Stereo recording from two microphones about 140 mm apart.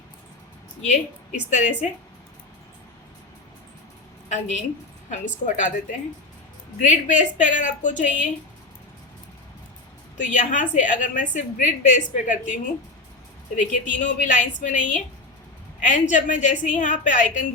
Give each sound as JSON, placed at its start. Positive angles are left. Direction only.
{"t": 0.8, "sound": "a woman's voice", "side_deg": 55}
{"t": 4.3, "sound": "a woman's voice", "side_deg": 55}
{"t": 5.5, "sound": "a woman's voice", "side_deg": 65}
{"t": 10.2, "sound": "a woman's voice", "side_deg": 65}
{"t": 13.6, "sound": "a woman's voice", "side_deg": 65}